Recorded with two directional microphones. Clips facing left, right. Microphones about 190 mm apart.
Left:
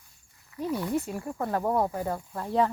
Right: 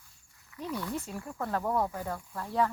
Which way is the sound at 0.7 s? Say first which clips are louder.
Left 6 dB; 25° left (ahead or behind).